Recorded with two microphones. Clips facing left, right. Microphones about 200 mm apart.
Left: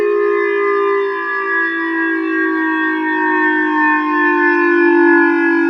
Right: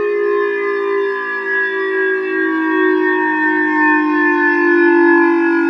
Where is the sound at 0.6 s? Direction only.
15° right (ahead or behind).